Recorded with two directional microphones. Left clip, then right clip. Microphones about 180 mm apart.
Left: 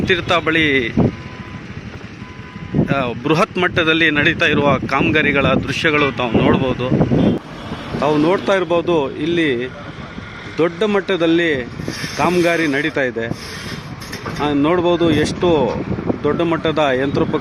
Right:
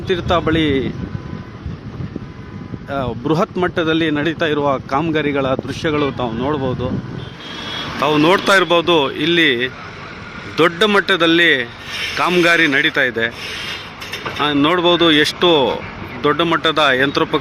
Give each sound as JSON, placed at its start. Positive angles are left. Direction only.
{"t": 0.0, "sound": "speech", "side_deg": -5}
{"t": 2.9, "sound": "speech", "side_deg": -5}
{"t": 8.0, "sound": "speech", "side_deg": 5}
{"t": 11.9, "sound": "speech", "side_deg": -35}
{"t": 12.4, "sound": "speech", "side_deg": 10}
{"t": 13.7, "sound": "vehicle", "side_deg": -35}
{"t": 14.4, "sound": "speech", "side_deg": 10}